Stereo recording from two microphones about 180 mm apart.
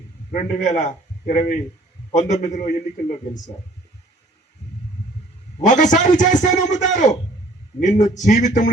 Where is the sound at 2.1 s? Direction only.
40° left (ahead or behind).